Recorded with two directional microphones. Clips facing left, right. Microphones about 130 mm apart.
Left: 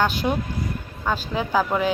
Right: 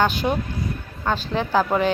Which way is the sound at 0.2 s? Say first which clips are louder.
Right 1 dB; 10° right (ahead or behind).